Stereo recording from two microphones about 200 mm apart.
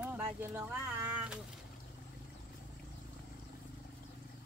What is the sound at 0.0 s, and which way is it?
Speech, 10° right (ahead or behind).